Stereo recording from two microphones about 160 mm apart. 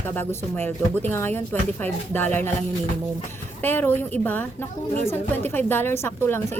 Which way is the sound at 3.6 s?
15° left (ahead or behind).